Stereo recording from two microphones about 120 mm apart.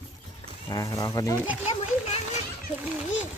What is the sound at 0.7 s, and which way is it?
Speech, 30° left (ahead or behind).